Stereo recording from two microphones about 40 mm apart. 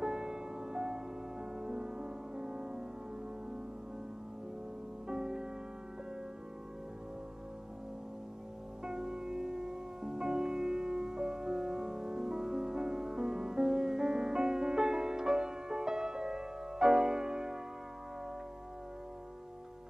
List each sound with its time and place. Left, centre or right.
0.0 s music: centre
5.0 s music: centre
8.8 s music: centre